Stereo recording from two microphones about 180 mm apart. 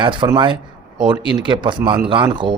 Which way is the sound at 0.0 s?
25° right (ahead or behind).